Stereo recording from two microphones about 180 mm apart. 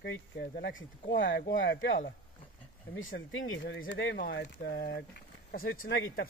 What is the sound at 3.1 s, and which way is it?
Speech, 75° left (ahead or behind).